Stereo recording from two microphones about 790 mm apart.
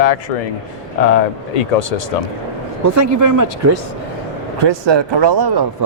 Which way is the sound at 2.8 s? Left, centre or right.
Right.